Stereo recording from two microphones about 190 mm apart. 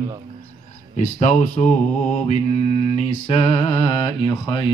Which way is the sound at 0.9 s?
40° left (ahead or behind).